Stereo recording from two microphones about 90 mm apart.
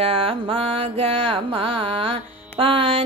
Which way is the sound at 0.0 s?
90° right.